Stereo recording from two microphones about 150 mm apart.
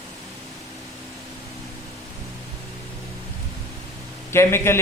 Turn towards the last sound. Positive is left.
turn(degrees=15)  # may be behind; listen again after turning